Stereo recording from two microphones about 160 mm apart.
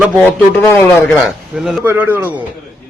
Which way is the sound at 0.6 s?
15° left (ahead or behind).